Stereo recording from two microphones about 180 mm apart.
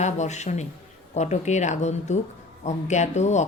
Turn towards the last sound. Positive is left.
turn(degrees=40)  # may be behind; listen again after turning